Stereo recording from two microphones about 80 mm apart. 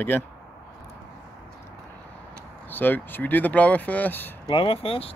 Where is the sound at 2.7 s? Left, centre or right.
Left.